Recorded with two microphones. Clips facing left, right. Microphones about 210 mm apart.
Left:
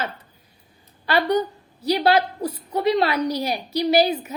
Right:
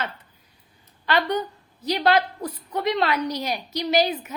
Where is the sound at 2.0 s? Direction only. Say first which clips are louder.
Left 1 dB; 35° left (ahead or behind).